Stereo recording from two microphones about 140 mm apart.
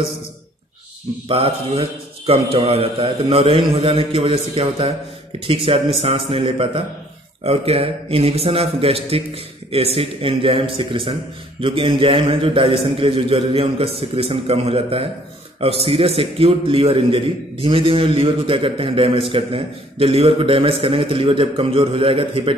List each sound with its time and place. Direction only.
1.3 s a man's voice: 45° right (ahead or behind)